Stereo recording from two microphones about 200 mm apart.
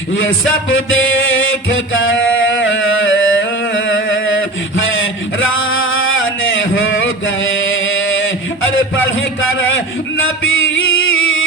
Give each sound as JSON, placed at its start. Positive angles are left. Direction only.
{"t": 0.7, "sound": "music", "side_deg": 75}
{"t": 5.4, "sound": "a sound", "side_deg": 80}
{"t": 9.4, "sound": "music", "side_deg": 80}